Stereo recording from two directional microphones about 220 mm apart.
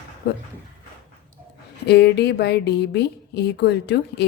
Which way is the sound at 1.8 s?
50° left (ahead or behind).